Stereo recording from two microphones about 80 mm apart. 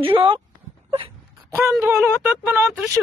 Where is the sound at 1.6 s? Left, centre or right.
Right.